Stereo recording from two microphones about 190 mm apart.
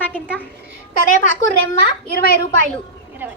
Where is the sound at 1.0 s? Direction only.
45° left (ahead or behind).